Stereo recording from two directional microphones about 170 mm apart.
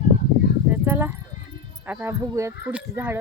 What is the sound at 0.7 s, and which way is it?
Horse, 10° right (ahead or behind).